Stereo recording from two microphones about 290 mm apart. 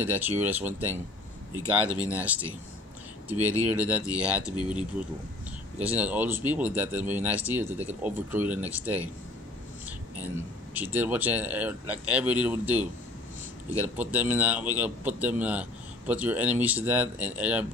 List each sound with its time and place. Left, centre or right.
0.0 s speech: centre
4.6 s speech: centre
5.8 s speech: centre